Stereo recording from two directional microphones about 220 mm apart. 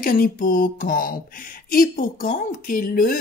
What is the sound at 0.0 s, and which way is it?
Speech, 40° left (ahead or behind).